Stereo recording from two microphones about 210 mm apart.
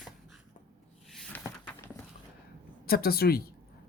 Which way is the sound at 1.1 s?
Centre (ahead or behind).